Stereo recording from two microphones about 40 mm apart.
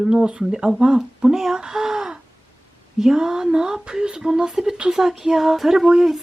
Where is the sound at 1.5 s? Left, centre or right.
Centre.